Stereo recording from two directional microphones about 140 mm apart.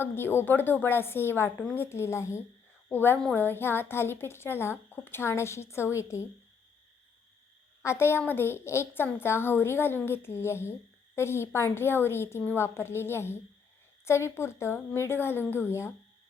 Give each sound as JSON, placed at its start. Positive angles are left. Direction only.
{"t": 0.0, "sound": "a woman's voice", "side_deg": 15}
{"t": 7.8, "sound": "a woman's voice", "side_deg": 20}